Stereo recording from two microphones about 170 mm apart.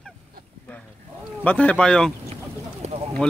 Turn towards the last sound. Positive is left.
turn(degrees=5)  # may be behind; listen again after turning